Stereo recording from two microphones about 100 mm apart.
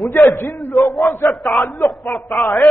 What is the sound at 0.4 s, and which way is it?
Speech, 25° left (ahead or behind).